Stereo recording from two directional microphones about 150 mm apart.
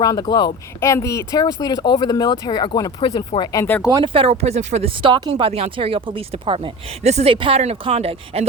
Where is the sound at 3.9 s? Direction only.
30° right (ahead or behind).